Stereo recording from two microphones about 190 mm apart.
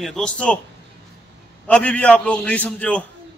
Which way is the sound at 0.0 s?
5° left (ahead or behind).